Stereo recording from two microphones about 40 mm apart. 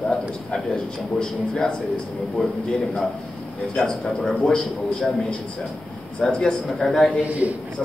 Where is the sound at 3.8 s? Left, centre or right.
Left.